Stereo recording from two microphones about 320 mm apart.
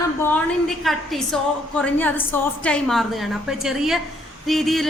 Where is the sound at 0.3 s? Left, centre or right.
Centre.